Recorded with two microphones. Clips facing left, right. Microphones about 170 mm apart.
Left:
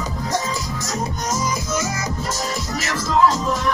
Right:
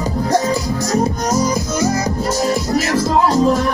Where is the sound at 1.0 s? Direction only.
35° right (ahead or behind).